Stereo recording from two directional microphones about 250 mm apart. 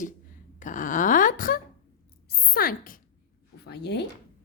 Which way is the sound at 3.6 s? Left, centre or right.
Left.